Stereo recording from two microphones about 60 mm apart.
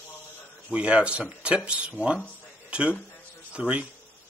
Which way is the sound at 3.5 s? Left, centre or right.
Centre.